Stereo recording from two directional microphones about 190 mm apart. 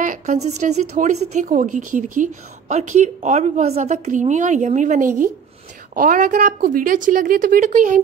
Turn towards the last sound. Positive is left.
turn(degrees=-40)  # may be behind; listen again after turning